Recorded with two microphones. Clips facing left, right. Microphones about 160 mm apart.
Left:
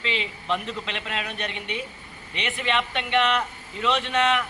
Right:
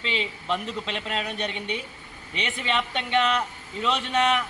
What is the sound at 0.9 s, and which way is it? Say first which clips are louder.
Speech: right 2 dB; 35° right (ahead or behind).